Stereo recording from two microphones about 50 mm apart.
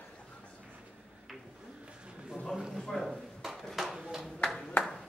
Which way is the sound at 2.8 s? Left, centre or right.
Centre.